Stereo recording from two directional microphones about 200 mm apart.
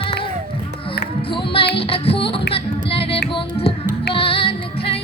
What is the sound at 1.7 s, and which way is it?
Music, 30° left (ahead or behind).